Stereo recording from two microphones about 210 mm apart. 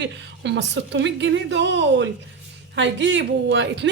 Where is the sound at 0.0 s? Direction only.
55° right (ahead or behind).